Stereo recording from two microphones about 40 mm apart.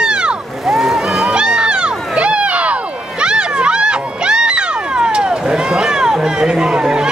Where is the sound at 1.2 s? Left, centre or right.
Right.